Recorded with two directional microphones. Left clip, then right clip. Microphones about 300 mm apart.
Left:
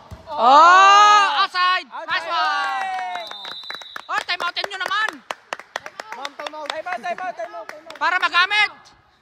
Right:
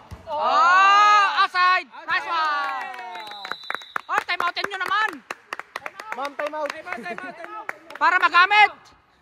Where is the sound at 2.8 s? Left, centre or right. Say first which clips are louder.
Left 8 dB; centre.